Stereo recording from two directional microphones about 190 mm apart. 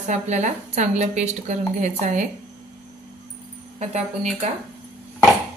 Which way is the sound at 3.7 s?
35° right (ahead or behind).